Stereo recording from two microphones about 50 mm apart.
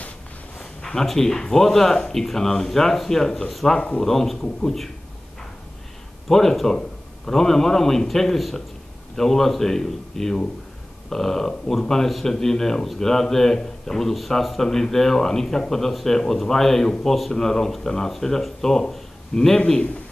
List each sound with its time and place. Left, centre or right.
0.6 s a sound: centre
1.0 s speech: centre
6.2 s speech: centre; by 20.0 s left